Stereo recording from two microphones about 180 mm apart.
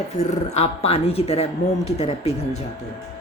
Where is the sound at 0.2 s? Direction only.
40° left (ahead or behind).